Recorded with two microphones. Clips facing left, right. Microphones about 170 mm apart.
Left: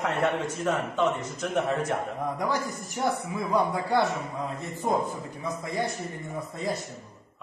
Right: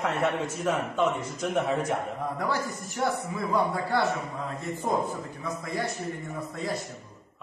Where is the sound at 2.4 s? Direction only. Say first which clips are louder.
Left 1 dB; 15° left (ahead or behind).